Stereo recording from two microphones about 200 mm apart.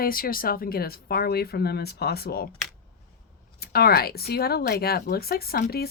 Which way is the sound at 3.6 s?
50° left (ahead or behind).